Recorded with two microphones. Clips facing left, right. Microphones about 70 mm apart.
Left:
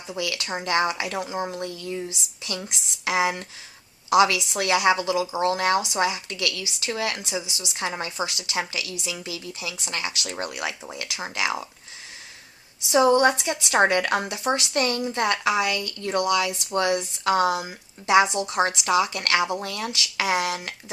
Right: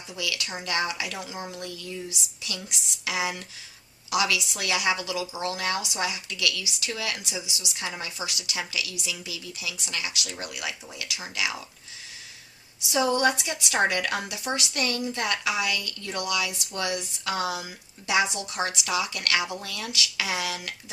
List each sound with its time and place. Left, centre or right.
0.1 s speech: left
12.9 s speech: left